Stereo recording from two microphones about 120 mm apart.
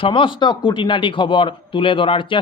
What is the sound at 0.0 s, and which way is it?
A man's voice, 45° left (ahead or behind).